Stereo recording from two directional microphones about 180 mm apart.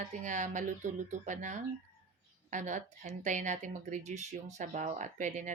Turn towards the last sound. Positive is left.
turn(degrees=-45)  # may be behind; listen again after turning